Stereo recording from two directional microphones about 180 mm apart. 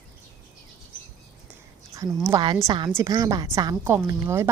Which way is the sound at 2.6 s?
25° right (ahead or behind).